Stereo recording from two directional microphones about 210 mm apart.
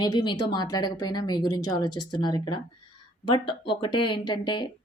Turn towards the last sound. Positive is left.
turn(degrees=20)  # may be behind; listen again after turning